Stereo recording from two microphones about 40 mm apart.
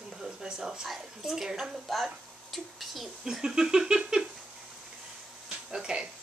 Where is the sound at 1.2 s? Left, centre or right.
Centre.